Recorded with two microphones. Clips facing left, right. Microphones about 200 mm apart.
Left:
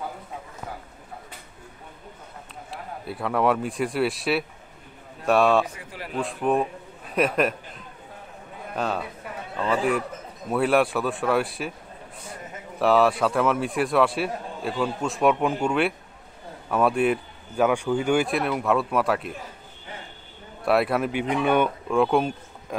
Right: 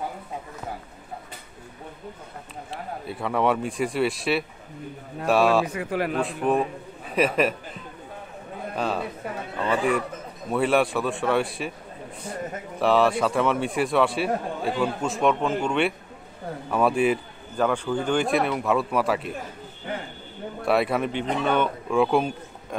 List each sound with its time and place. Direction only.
2.7 s a man's voice: centre (ahead or behind)
5.7 s speech: 65° right (ahead or behind)
6.2 s a man's voice: centre (ahead or behind)
12.7 s a man's voice: centre (ahead or behind)
19.9 s a sound: 60° right (ahead or behind)
20.6 s speech: centre (ahead or behind)
21.9 s speech: centre (ahead or behind)